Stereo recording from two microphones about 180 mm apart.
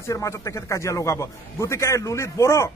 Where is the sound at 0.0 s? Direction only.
15° left (ahead or behind).